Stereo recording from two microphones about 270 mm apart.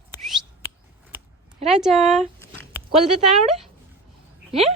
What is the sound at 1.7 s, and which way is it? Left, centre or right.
Speech, centre.